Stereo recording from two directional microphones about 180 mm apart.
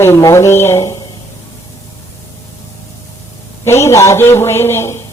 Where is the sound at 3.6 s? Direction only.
15° left (ahead or behind).